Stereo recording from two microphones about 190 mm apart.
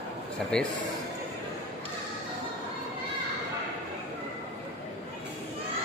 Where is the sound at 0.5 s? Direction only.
5° left (ahead or behind).